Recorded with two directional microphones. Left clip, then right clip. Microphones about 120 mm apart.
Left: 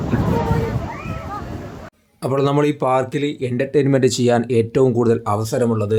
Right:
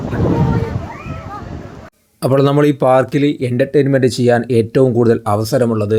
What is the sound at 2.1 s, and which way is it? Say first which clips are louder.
Speech: right 7 dB; 35° right (ahead or behind).